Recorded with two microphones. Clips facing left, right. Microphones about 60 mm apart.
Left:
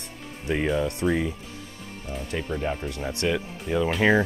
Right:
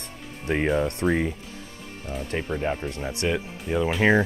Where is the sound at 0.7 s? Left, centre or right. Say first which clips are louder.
Right 1 dB; right.